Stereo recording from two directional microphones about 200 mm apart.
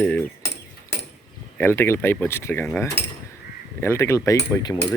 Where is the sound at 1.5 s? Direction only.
10° left (ahead or behind).